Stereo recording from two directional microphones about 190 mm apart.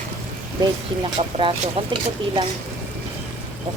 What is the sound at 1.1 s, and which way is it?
Speech, 30° right (ahead or behind).